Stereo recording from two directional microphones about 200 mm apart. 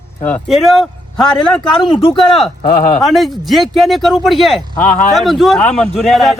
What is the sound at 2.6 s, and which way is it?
Speech, 50° left (ahead or behind).